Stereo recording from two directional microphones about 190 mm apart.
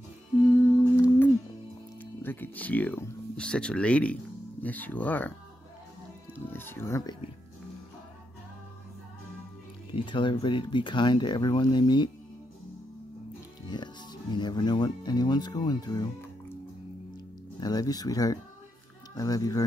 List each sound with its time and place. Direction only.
0.9 s music: 10° left (ahead or behind)
2.2 s speech: 10° left (ahead or behind)
6.3 s speech: 10° left (ahead or behind)
9.8 s speech: 25° left (ahead or behind)
13.7 s music: 20° left (ahead or behind)
17.6 s speech: 20° left (ahead or behind)